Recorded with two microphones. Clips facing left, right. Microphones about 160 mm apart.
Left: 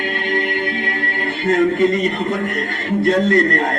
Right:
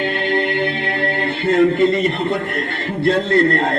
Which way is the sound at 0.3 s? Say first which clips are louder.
Right 1 dB; 30° right (ahead or behind).